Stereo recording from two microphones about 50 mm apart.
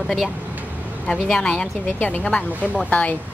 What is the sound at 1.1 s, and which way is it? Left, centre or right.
A woman's voice, centre.